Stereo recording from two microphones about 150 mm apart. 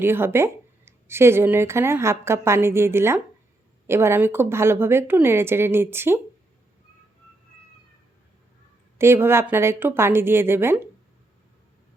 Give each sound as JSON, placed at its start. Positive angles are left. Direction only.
{"t": 0.0, "sound": "a woman's voice", "side_deg": -15}
{"t": 9.0, "sound": "a woman's voice", "side_deg": -15}